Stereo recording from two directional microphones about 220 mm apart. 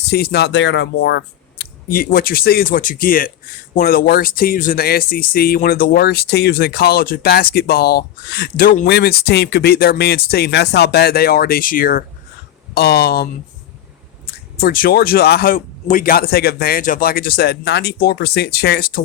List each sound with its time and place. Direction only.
0.1 s speech: 45° left (ahead or behind)
14.6 s speech: 40° left (ahead or behind)